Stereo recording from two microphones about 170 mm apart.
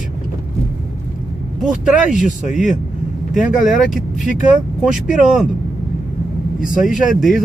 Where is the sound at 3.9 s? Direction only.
45° left (ahead or behind).